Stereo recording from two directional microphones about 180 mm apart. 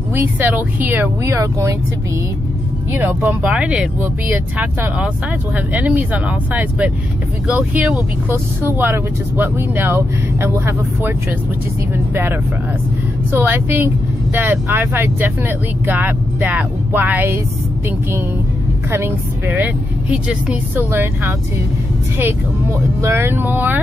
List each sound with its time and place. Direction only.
0.1 s speech: 10° right (ahead or behind)
3.0 s speech: 10° right (ahead or behind)
18.9 s speech: 15° right (ahead or behind)
22.9 s speech: 15° right (ahead or behind)